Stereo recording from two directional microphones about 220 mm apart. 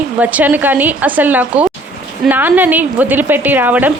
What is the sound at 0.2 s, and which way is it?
Speech, 5° right (ahead or behind).